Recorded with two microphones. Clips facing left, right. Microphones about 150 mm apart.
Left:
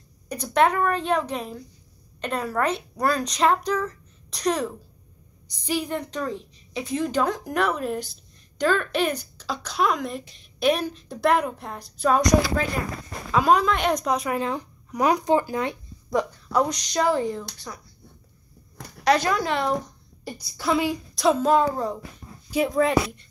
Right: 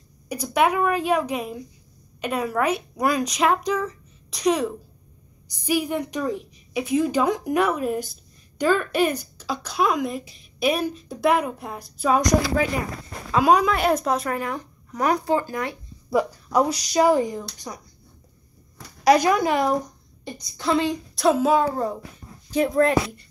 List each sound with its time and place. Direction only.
0.3 s a woman's voice: 10° right (ahead or behind)
14.3 s speech: 15° left (ahead or behind)
16.1 s a woman's voice: 5° right (ahead or behind)
19.0 s a woman's voice: 15° right (ahead or behind)
20.2 s a woman's voice: 5° left (ahead or behind)